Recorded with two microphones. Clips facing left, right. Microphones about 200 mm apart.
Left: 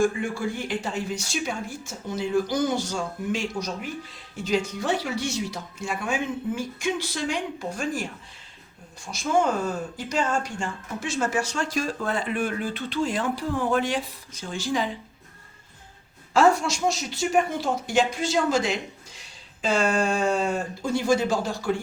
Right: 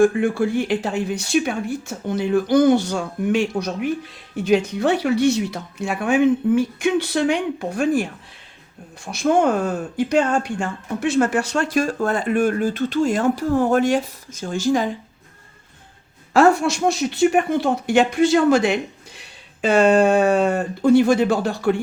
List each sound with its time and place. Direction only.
0.0 s speech: 55° right (ahead or behind)
9.0 s speech: 60° right (ahead or behind)
16.3 s speech: 60° right (ahead or behind)